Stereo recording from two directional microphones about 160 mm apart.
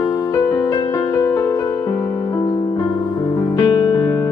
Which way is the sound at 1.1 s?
15° left (ahead or behind).